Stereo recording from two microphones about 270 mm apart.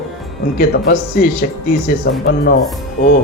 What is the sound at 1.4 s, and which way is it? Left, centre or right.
Speech, left.